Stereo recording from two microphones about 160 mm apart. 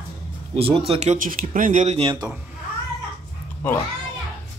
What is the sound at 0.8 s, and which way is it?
Speech, 40° right (ahead or behind).